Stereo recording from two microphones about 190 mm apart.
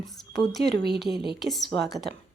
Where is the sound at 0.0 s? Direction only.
Centre (ahead or behind).